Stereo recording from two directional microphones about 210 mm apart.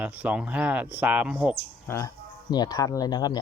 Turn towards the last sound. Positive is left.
turn(degrees=20)  # may be behind; listen again after turning